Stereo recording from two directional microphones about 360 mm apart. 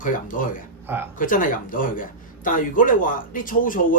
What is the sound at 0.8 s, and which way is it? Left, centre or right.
Speech, centre.